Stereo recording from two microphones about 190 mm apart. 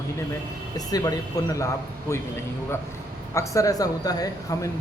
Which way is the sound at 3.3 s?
15° left (ahead or behind).